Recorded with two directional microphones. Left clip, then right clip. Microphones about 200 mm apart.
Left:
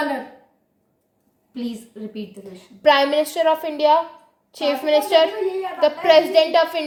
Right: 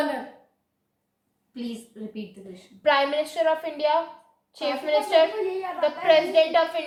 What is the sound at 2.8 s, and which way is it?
A woman's voice, 55° left (ahead or behind).